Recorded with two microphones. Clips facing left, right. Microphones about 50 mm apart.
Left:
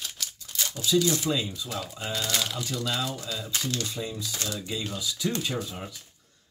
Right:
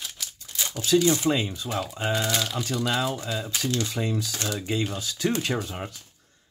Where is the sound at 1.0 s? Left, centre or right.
Right.